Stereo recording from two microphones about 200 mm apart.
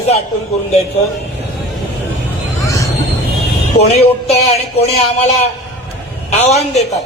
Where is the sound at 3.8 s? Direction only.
30° left (ahead or behind).